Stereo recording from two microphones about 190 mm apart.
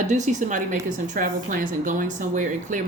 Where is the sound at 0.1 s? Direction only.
40° right (ahead or behind).